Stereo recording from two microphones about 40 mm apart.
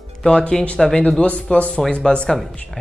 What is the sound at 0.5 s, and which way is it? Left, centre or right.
Speech, centre.